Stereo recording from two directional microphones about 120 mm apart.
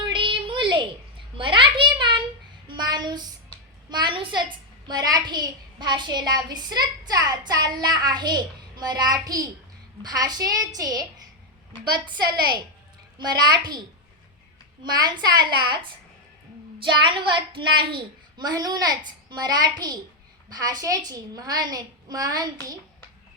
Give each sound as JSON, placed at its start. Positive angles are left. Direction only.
{"t": 0.0, "sound": "a sound", "side_deg": -45}
{"t": 2.6, "sound": "child singing", "side_deg": -35}
{"t": 3.8, "sound": "a child's voice", "side_deg": -40}
{"t": 14.8, "sound": "a child's voice", "side_deg": -35}